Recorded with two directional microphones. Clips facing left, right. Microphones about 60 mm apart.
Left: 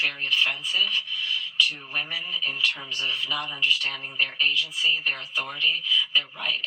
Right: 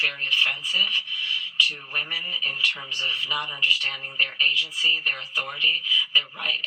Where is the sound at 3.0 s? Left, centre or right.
Right.